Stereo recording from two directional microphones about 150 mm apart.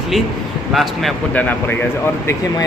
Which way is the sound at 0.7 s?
Centre (ahead or behind).